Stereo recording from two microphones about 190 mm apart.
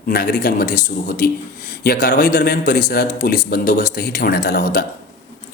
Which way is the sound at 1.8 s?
50° left (ahead or behind).